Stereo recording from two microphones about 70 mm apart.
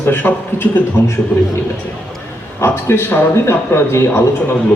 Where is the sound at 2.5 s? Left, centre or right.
Left.